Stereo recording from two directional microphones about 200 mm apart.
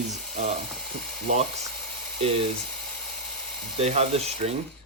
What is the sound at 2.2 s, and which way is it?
Speech, 30° right (ahead or behind).